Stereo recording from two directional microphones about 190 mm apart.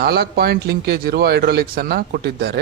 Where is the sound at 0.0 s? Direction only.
55° right (ahead or behind).